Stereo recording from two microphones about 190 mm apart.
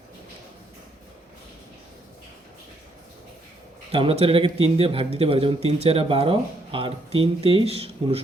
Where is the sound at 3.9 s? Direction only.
30° right (ahead or behind).